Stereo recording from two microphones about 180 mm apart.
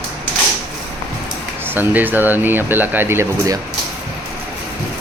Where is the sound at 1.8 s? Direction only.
10° right (ahead or behind).